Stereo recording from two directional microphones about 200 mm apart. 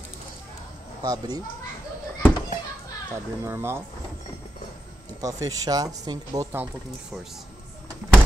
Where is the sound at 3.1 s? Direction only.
10° right (ahead or behind).